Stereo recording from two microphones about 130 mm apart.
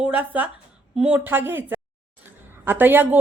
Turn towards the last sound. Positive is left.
turn(degrees=-15)  # may be behind; listen again after turning